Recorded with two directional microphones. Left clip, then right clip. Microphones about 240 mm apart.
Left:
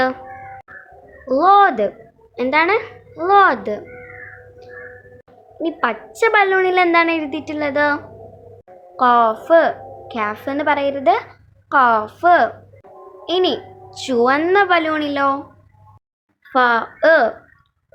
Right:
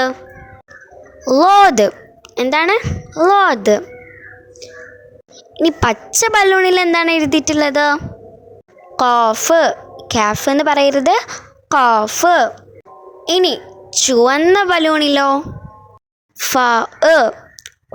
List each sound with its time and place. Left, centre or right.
1.3 s a woman's voice: right
5.5 s a woman's voice: right
16.5 s speech: right